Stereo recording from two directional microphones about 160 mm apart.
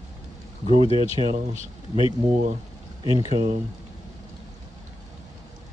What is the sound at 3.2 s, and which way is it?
Speech, 25° right (ahead or behind).